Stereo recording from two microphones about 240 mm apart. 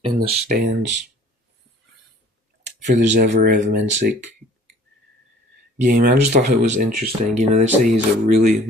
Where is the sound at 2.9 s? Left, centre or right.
Right.